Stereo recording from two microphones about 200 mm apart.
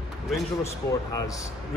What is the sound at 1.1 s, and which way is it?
Speech, 15° left (ahead or behind).